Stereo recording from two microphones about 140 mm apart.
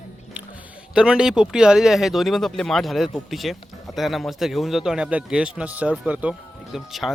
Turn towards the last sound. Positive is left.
turn(degrees=0)  # may be behind; listen again after turning